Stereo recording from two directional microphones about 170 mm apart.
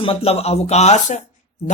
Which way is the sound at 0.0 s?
35° left (ahead or behind).